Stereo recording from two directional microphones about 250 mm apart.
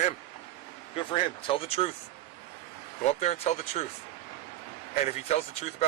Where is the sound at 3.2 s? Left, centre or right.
Left.